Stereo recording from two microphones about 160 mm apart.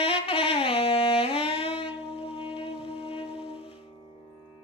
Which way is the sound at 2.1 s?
35° left (ahead or behind).